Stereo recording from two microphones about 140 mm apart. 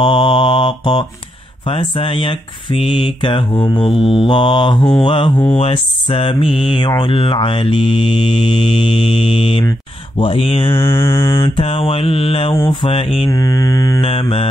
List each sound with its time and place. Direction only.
0.0 s mantra: 35° left (ahead or behind)
1.7 s speech: 40° left (ahead or behind)
10.7 s mantra: 20° left (ahead or behind)
11.3 s speech: 40° left (ahead or behind)
13.3 s mantra: 25° left (ahead or behind)
14.0 s mantra: 45° left (ahead or behind)